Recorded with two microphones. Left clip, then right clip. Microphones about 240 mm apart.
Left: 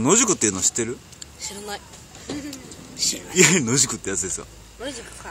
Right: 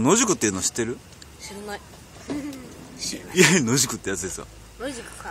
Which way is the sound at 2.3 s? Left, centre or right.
Left.